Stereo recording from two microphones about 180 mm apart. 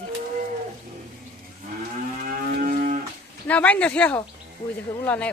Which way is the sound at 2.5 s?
50° right (ahead or behind).